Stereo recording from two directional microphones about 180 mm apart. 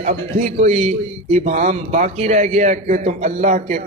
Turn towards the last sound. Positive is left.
turn(degrees=-45)  # may be behind; listen again after turning